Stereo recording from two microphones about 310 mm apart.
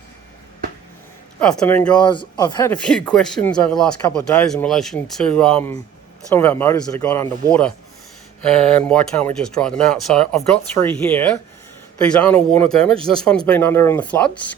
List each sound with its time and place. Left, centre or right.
1.4 s speech: centre
8.4 s speech: centre
8.9 s speech: centre